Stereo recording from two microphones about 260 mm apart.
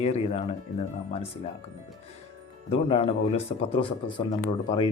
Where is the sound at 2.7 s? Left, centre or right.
Left.